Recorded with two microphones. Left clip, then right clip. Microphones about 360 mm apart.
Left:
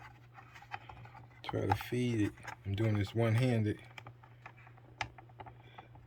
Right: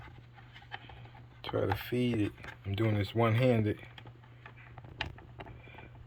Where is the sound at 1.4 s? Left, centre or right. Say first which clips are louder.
Right 2 dB; centre.